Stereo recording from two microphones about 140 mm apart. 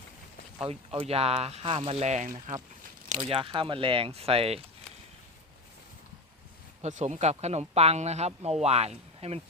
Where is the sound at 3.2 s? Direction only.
40° right (ahead or behind).